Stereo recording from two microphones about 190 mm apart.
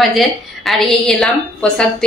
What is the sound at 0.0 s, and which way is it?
A woman's voice, centre (ahead or behind).